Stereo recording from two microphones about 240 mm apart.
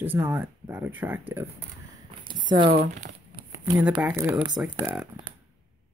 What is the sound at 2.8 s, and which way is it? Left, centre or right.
Speech, right.